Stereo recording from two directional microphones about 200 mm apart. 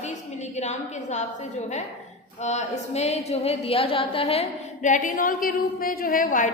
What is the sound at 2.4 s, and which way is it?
A woman's voice, 35° left (ahead or behind).